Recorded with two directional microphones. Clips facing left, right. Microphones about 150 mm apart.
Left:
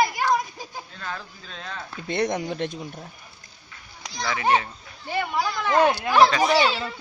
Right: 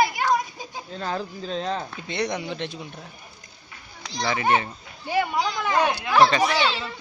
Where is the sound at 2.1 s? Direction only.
50° left (ahead or behind).